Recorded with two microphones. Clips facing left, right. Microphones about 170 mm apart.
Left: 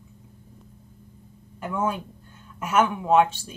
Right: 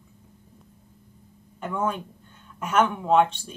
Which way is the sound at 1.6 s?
5° left (ahead or behind).